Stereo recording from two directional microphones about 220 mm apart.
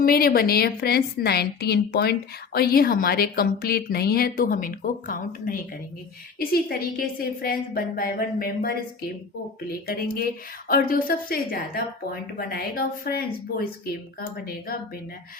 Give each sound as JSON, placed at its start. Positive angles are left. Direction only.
{"t": 0.0, "sound": "a woman's voice", "side_deg": 40}